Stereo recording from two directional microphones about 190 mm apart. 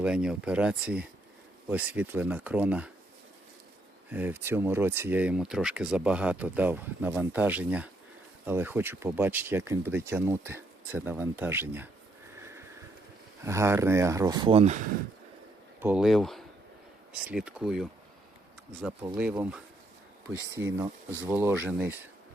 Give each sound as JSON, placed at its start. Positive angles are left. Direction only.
{"t": 0.0, "sound": "speech", "side_deg": -5}
{"t": 4.1, "sound": "speech", "side_deg": -10}
{"t": 12.4, "sound": "sniff", "side_deg": -15}
{"t": 13.4, "sound": "speech", "side_deg": -15}
{"t": 15.8, "sound": "speech", "side_deg": -5}
{"t": 19.0, "sound": "speech", "side_deg": -10}